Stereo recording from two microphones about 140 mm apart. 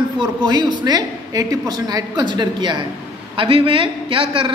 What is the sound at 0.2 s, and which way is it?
A woman's voice, 30° right (ahead or behind).